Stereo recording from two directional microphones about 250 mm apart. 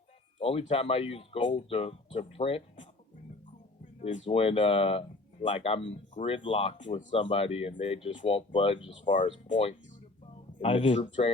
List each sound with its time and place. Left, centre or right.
0.3 s speech: left
4.0 s speech: left